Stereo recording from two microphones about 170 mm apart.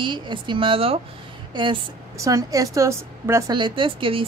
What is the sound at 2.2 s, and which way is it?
Speech, 20° right (ahead or behind).